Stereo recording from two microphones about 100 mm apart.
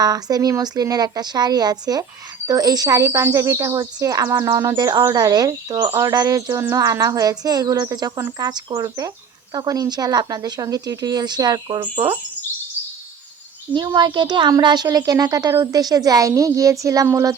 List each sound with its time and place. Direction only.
0.0 s speech: 40° right (ahead or behind)
13.9 s speech: 45° right (ahead or behind)